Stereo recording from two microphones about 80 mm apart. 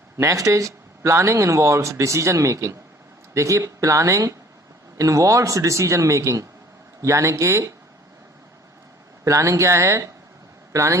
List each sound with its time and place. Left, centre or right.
0.2 s speech: right
9.2 s speech: right